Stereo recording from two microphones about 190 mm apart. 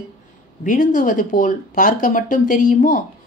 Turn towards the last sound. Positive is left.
turn(degrees=45)  # may be behind; listen again after turning